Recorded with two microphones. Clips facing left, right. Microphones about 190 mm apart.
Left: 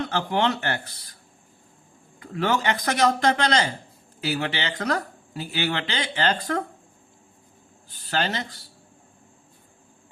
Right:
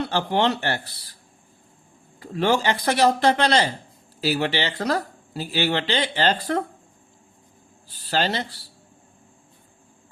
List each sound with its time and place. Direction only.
0.0 s speech: 35° right (ahead or behind)
2.1 s speech: 30° right (ahead or behind)
7.9 s speech: 35° right (ahead or behind)